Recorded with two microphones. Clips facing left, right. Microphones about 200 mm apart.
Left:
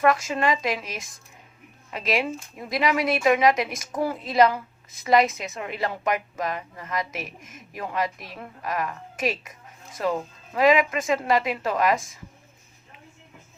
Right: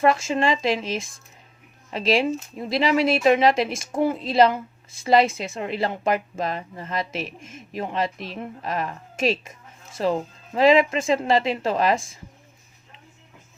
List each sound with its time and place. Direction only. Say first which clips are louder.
0.0 s speech: right 2 dB; 25° right (ahead or behind)